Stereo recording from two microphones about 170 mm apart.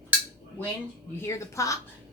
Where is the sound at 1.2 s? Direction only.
20° left (ahead or behind).